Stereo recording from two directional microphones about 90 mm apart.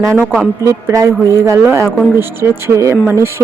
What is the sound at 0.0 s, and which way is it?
Speech, 35° right (ahead or behind).